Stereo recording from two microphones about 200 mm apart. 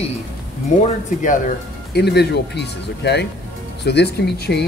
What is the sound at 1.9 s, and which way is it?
Speech, 55° left (ahead or behind).